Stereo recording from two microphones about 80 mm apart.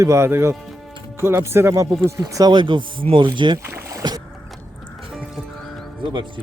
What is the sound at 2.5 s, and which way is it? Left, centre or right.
Speech, right.